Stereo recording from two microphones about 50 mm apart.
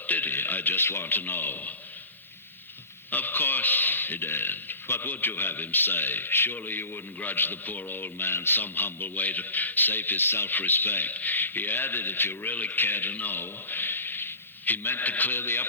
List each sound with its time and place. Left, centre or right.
0.1 s a man's voice: left
3.1 s a man's voice: left